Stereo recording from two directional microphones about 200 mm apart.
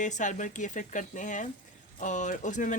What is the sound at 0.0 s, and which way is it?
Speech, 40° left (ahead or behind).